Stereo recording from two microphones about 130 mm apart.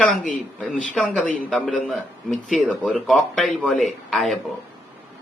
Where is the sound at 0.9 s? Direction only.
10° left (ahead or behind).